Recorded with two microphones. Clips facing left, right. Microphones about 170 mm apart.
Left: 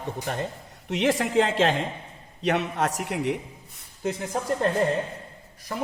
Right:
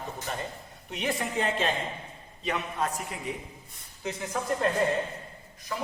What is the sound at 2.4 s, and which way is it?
A man's voice, 75° left (ahead or behind).